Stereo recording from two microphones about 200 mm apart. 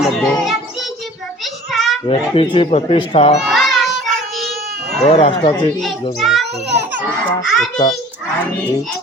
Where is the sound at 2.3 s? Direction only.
25° left (ahead or behind).